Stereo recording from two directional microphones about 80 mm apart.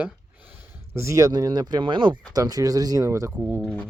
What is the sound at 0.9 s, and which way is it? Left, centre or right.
Speech, right.